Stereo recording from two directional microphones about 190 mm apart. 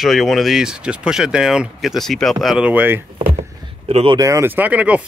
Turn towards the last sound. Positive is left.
turn(degrees=-5)  # may be behind; listen again after turning